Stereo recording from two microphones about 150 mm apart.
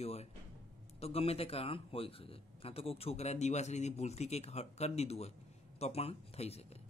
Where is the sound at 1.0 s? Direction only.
40° left (ahead or behind).